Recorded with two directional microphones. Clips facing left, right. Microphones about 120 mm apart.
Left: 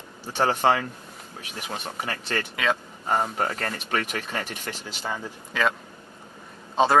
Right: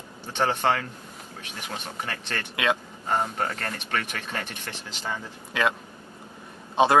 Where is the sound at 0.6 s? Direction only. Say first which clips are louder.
Left 3 dB; 20° left (ahead or behind).